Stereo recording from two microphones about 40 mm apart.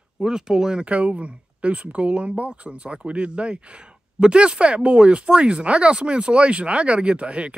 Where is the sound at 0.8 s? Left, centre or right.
Right.